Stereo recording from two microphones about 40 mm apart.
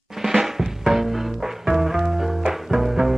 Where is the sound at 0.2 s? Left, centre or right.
Centre.